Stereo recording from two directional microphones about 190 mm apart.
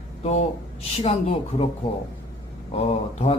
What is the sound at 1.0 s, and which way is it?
Speech, 30° left (ahead or behind).